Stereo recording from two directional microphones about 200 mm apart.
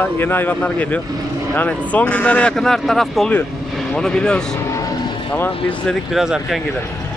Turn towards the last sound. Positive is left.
turn(degrees=0)  # may be behind; listen again after turning